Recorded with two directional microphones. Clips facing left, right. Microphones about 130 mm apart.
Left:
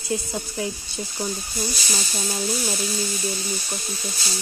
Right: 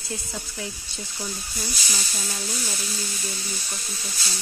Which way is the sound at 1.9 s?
25° left (ahead or behind).